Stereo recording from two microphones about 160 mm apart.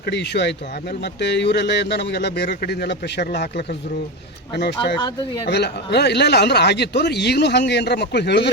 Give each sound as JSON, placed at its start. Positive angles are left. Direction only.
{"t": 0.0, "sound": "speech", "side_deg": 90}
{"t": 4.5, "sound": "speech", "side_deg": 90}